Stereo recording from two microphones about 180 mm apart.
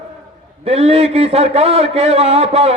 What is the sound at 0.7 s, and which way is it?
A man's voice, 35° right (ahead or behind).